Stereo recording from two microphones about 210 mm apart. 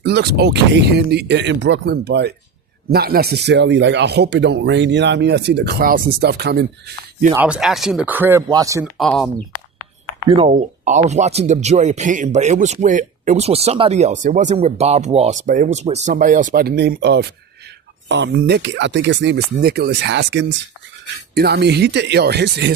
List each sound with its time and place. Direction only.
0.0 s speech: 50° right (ahead or behind)
7.3 s speech: 5° right (ahead or behind)
9.0 s speech: centre (ahead or behind)
10.2 s speech: 25° right (ahead or behind); by 19.4 s 60° right (ahead or behind)
19.5 s speech: 45° right (ahead or behind)